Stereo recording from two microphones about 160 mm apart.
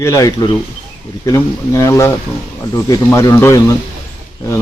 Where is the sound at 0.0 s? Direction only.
20° left (ahead or behind).